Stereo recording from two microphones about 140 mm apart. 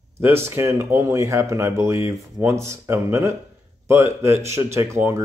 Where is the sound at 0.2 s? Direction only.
20° right (ahead or behind).